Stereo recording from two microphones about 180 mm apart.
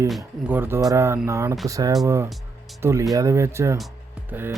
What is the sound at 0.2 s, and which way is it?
Speech, 10° right (ahead or behind).